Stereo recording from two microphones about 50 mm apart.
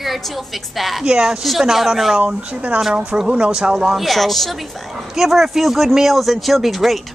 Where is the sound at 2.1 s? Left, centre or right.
Right.